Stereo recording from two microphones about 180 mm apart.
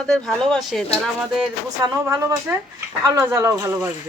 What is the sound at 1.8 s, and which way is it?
Speech, 15° right (ahead or behind).